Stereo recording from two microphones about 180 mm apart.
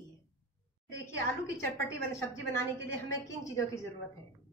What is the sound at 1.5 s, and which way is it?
A woman's voice, 15° left (ahead or behind).